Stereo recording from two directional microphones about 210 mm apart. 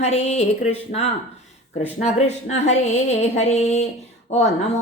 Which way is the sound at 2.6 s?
35° left (ahead or behind).